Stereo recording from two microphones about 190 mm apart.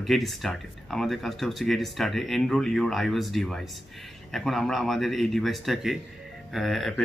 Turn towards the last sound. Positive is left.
turn(degrees=0)  # may be behind; listen again after turning